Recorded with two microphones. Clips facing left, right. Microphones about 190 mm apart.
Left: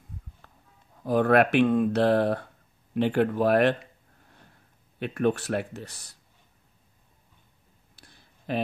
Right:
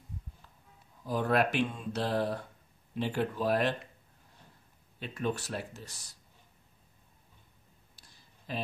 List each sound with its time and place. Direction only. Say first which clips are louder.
0.4 s music: left 4 dB; 60° left (ahead or behind)
1.0 s speech: left 8 dB; 60° left (ahead or behind)
4.9 s speech: left 9 dB; 60° left (ahead or behind)
7.9 s a sound: left 7 dB; 60° left (ahead or behind)